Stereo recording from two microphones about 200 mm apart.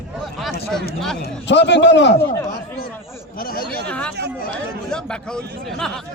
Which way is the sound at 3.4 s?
45° left (ahead or behind).